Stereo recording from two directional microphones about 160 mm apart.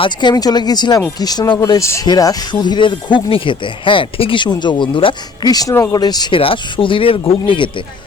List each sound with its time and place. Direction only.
0.0 s speech: 30° left (ahead or behind)